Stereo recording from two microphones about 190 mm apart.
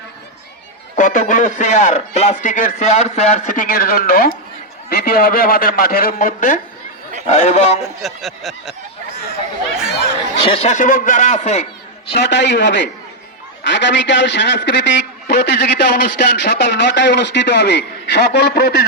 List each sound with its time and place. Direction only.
0.9 s a man's voice: 45° left (ahead or behind)
7.8 s speech: centre (ahead or behind)
10.4 s a man's voice: 30° left (ahead or behind)
12.1 s a man's voice: 65° left (ahead or behind)